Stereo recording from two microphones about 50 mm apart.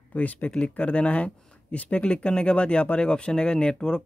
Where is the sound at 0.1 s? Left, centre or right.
Left.